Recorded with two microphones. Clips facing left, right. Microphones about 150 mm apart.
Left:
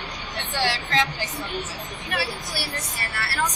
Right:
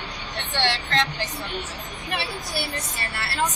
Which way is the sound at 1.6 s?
25° right (ahead or behind).